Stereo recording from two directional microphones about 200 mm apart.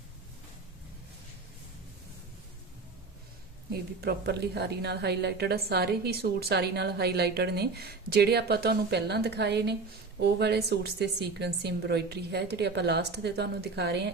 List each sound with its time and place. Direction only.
3.7 s a woman's voice: 55° right (ahead or behind)